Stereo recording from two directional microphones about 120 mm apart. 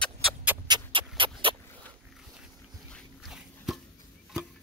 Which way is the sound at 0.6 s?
40° right (ahead or behind).